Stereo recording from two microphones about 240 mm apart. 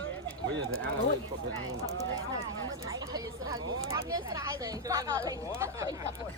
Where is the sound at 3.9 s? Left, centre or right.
Centre.